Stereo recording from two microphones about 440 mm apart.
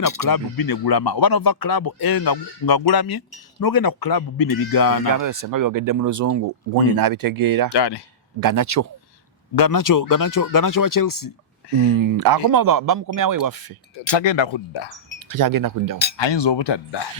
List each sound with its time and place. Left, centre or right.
0.0 s speech: left
5.2 s speech: right
7.7 s speech: left
8.4 s speech: right
9.6 s speech: left
11.6 s a sound: left
12.1 s speech: right
14.1 s speech: left
15.3 s speech: right
16.1 s speech: left